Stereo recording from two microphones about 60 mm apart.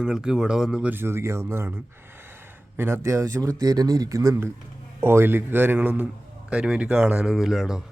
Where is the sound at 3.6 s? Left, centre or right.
Right.